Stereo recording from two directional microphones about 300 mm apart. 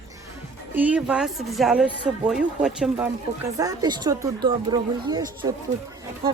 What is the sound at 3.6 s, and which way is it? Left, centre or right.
Speech, centre.